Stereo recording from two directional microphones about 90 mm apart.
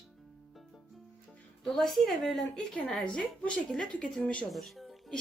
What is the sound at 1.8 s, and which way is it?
A woman's voice, centre (ahead or behind).